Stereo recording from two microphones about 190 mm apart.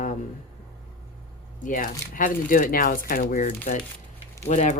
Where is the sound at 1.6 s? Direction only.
45° left (ahead or behind).